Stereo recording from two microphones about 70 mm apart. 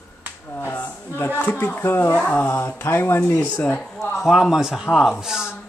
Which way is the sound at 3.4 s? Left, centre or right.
Centre.